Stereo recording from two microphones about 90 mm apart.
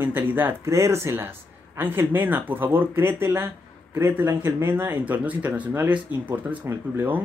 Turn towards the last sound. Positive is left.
turn(degrees=-25)  # may be behind; listen again after turning